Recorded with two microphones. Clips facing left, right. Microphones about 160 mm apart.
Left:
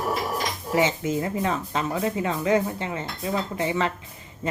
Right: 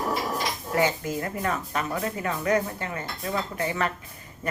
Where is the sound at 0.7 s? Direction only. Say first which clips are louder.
Left 3 dB; 20° left (ahead or behind).